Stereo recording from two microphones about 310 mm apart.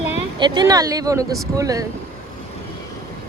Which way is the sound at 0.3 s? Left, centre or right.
Centre.